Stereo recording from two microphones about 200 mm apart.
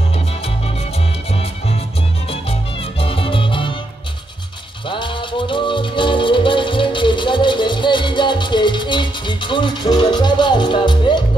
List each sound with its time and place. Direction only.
0.9 s music: 30° left (ahead or behind)
2.2 s salsa music: 30° left (ahead or behind)
4.8 s music: 25° left (ahead or behind)